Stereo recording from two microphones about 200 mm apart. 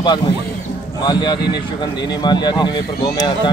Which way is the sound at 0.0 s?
20° left (ahead or behind).